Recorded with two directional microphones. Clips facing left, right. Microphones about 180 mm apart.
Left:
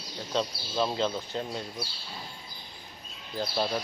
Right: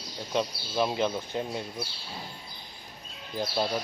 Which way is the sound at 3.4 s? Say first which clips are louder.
Right 1 dB; 15° right (ahead or behind).